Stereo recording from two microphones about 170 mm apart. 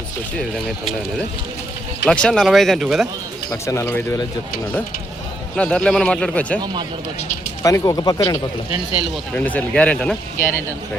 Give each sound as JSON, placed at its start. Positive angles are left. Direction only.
{"t": 2.0, "sound": "speech", "side_deg": 5}
{"t": 3.5, "sound": "speech", "side_deg": 15}
{"t": 5.5, "sound": "speech", "side_deg": 5}
{"t": 7.6, "sound": "speech", "side_deg": 20}
{"t": 9.3, "sound": "speech", "side_deg": 10}